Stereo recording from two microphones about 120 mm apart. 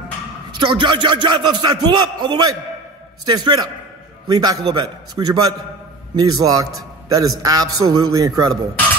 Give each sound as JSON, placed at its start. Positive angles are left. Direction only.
{"t": 0.5, "sound": "a man's voice", "side_deg": -45}